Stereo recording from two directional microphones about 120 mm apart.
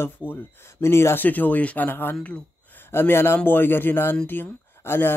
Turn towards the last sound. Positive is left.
turn(degrees=20)  # may be behind; listen again after turning